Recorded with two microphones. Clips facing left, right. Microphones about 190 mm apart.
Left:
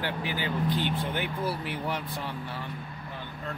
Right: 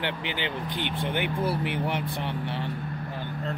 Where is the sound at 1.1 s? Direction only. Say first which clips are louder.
Right 3 dB; 20° right (ahead or behind).